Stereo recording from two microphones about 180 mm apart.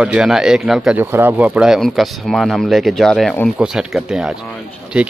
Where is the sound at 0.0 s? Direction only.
5° right (ahead or behind).